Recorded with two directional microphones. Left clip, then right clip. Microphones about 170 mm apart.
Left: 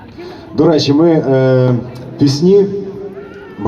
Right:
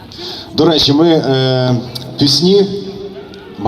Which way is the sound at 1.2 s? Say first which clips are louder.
Left 2 dB; centre (ahead or behind).